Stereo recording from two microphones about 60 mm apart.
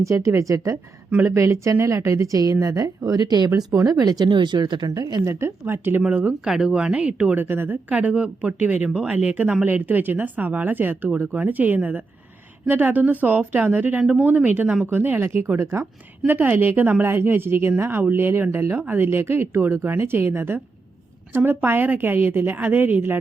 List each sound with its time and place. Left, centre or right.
0.0 s a woman's voice: right
1.2 s speech: right
5.2 s speech: right
6.4 s speech: centre
7.3 s speech: right
7.9 s speech: right
16.2 s speech: right